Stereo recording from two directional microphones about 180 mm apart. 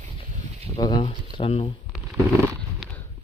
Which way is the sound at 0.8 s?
25° left (ahead or behind).